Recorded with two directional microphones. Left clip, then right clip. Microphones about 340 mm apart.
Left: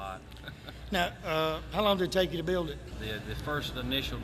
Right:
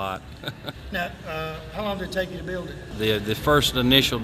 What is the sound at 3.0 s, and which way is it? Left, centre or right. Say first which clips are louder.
Speech: right 17 dB; right.